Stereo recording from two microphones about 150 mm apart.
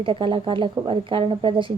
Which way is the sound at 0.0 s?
35° right (ahead or behind).